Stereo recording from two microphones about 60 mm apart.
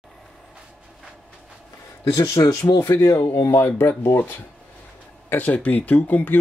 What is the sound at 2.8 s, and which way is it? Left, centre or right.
Speech, left.